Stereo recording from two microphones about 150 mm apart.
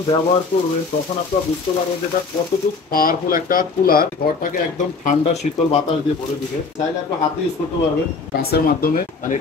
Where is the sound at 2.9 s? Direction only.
70° left (ahead or behind).